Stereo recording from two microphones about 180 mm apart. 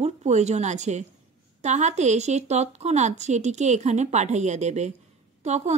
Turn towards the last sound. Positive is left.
turn(degrees=-40)  # may be behind; listen again after turning